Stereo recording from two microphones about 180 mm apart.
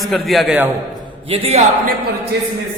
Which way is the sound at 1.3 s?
35° right (ahead or behind).